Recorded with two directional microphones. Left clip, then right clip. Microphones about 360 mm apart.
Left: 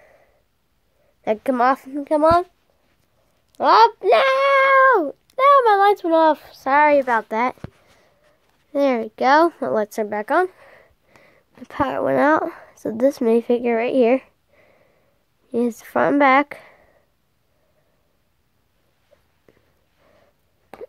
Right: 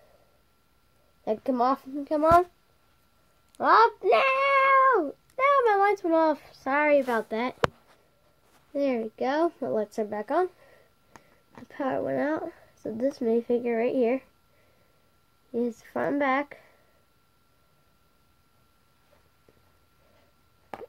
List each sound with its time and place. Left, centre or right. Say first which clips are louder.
1.2 s a woman's voice: left 7 dB; left
1.8 s a woman's voice: left 8 dB; left
3.5 s a child's voice: left 6 dB; left
8.7 s a woman's voice: left 8 dB; left
15.5 s a woman's voice: left 9 dB; left